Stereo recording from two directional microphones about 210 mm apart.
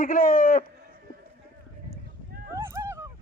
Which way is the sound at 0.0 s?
40° left (ahead or behind).